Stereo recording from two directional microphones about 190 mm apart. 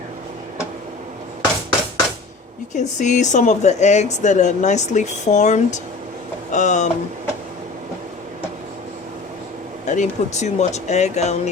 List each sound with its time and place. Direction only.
2.7 s speech: 40° left (ahead or behind)
9.8 s speech: 40° left (ahead or behind)